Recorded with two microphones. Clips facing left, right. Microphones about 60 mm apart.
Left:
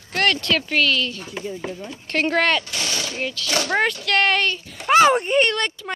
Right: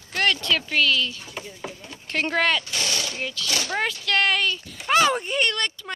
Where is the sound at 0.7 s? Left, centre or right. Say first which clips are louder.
Left 1 dB; left.